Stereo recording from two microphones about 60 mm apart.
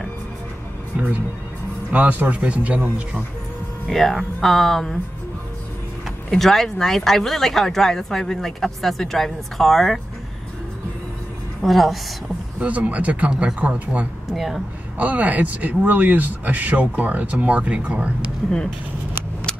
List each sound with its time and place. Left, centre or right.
1.9 s speech: right
3.9 s speech: centre
6.3 s speech: centre
11.6 s speech: centre
12.5 s speech: right
14.3 s speech: centre
15.0 s speech: right